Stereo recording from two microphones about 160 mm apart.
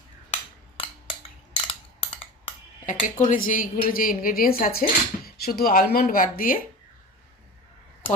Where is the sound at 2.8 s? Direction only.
55° left (ahead or behind).